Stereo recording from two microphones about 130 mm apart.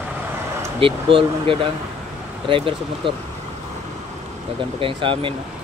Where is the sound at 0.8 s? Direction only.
45° right (ahead or behind).